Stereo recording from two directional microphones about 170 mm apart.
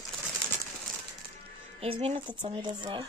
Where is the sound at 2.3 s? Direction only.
25° right (ahead or behind).